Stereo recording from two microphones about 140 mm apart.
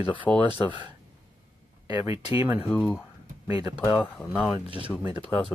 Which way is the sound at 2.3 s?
15° right (ahead or behind).